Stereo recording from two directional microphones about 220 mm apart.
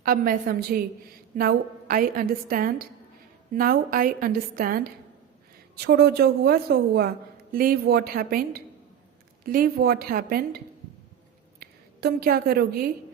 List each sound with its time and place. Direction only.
0.0 s a woman's voice: 40° right (ahead or behind)
11.6 s a woman's voice: 45° right (ahead or behind)